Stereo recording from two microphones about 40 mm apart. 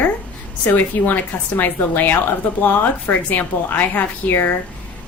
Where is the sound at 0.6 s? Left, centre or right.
Left.